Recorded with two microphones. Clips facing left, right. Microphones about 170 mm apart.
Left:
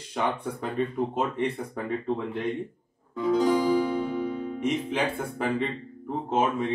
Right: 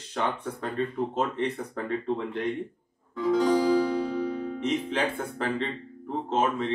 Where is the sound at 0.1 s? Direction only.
10° left (ahead or behind).